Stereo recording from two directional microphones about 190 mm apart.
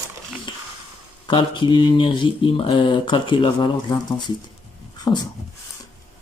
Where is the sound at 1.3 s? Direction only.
25° left (ahead or behind).